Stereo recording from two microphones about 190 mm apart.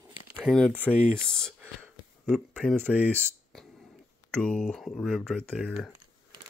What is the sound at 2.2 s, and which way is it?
Speech, centre (ahead or behind).